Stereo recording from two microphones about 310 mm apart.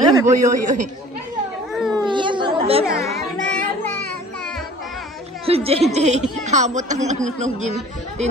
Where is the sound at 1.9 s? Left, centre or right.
Centre.